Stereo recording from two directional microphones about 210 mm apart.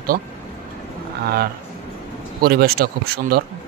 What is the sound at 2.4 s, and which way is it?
Speech, 45° right (ahead or behind).